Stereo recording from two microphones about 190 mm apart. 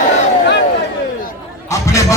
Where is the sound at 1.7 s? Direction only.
15° left (ahead or behind).